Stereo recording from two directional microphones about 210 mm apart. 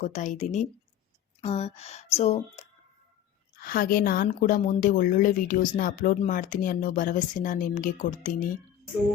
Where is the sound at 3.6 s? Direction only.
45° left (ahead or behind).